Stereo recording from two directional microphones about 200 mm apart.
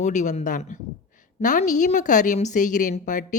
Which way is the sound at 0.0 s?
35° left (ahead or behind).